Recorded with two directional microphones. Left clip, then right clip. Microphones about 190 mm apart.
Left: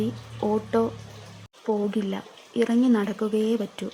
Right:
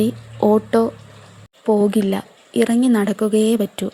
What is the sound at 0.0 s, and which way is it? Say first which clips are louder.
A woman's voice: right 10 dB; 25° right (ahead or behind).